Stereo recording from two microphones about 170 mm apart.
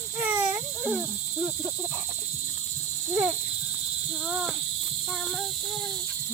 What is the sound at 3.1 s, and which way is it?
Speech, 15° right (ahead or behind).